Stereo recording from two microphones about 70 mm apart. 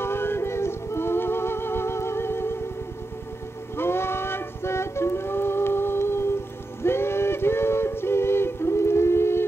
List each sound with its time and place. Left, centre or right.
0.0 s music: left
3.7 s music: left
6.8 s a sound: left